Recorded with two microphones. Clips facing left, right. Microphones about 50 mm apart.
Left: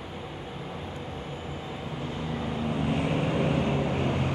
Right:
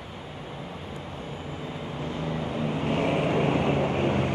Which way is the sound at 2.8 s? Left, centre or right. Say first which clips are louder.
Right 4 dB; right.